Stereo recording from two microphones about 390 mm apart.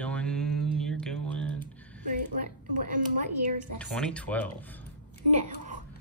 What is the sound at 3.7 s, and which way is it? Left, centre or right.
Speech, centre.